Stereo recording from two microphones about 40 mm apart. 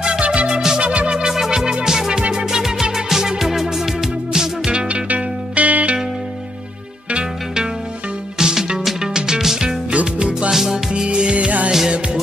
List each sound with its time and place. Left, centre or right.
0.2 s music: right
0.5 s music: centre
0.7 s music: right
1.2 s organ: centre
1.9 s music: centre
4.8 s music: right
7.1 s music: right
8.4 s music: centre
9.8 s music: right
10.5 s music: centre
10.9 s music: right
11.3 s music: right